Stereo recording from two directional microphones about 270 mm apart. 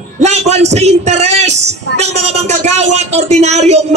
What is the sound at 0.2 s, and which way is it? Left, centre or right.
A man's voice, right.